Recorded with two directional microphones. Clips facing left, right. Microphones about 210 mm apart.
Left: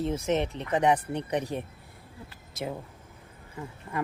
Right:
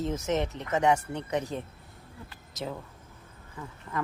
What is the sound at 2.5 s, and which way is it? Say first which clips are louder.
Speech: left 2 dB; 10° left (ahead or behind).